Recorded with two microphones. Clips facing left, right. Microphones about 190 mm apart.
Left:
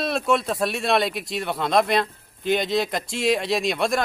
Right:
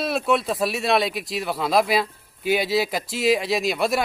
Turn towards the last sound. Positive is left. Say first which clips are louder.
# even
turn(degrees=-5)  # may be behind; listen again after turning